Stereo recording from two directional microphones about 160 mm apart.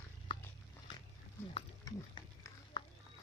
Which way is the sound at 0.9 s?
30° left (ahead or behind).